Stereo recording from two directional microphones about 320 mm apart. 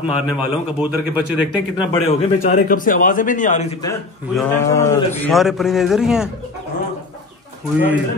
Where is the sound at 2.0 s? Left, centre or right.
Left.